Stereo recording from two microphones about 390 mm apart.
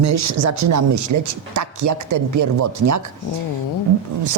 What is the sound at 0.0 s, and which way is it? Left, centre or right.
Speech, right.